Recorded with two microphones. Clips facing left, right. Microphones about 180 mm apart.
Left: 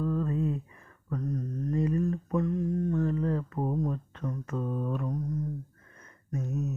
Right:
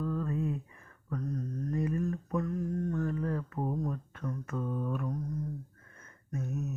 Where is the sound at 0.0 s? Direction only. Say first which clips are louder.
Left 4 dB; 30° left (ahead or behind).